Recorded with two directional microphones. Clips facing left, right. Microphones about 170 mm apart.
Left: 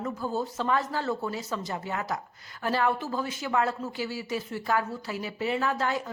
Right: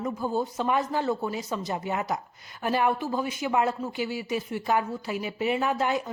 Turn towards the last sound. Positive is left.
turn(degrees=-20)  # may be behind; listen again after turning